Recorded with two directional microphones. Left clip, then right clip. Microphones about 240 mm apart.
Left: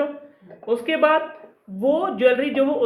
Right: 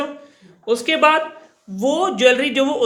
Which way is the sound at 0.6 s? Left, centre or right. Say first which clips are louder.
Right 4 dB; right.